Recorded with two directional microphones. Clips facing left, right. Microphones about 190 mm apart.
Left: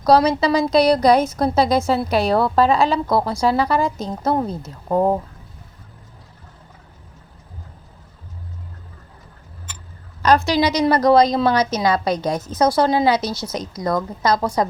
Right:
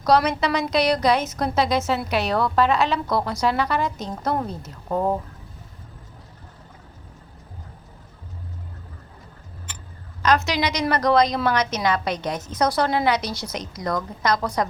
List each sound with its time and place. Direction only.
0.0 s a woman's voice: 30° left (ahead or behind)
10.2 s a woman's voice: 35° left (ahead or behind)